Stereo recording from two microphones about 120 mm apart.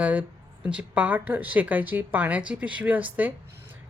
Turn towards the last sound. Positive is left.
turn(degrees=-15)  # may be behind; listen again after turning